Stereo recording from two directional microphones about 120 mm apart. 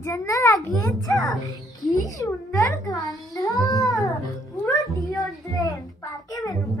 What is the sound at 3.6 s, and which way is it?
Babbling, 30° left (ahead or behind).